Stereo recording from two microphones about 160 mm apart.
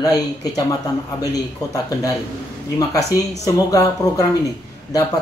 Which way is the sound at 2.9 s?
20° left (ahead or behind).